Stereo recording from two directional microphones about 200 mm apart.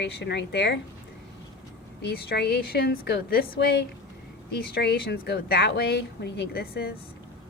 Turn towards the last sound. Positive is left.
turn(degrees=50)  # may be behind; listen again after turning